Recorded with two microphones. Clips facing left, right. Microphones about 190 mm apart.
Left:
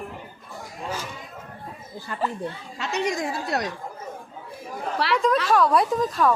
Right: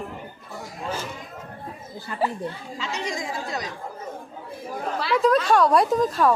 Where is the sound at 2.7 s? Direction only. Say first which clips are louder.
Left 7 dB; 65° left (ahead or behind).